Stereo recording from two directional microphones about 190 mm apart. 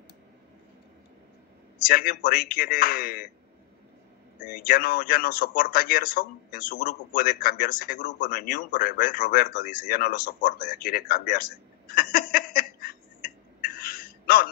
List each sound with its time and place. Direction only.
1.9 s a man's voice: 50° left (ahead or behind)
4.6 s a man's voice: 50° left (ahead or behind)
11.9 s a sound: 50° left (ahead or behind)